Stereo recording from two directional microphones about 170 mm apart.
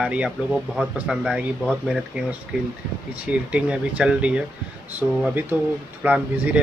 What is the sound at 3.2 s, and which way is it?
Speech, 10° right (ahead or behind).